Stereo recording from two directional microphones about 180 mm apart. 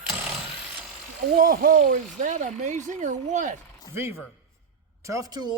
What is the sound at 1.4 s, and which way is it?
Speech, 50° right (ahead or behind).